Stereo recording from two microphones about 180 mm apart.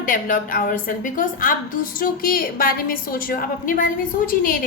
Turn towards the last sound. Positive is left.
turn(degrees=50)  # may be behind; listen again after turning